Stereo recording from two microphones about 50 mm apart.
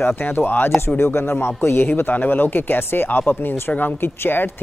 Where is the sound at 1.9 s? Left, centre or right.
Left.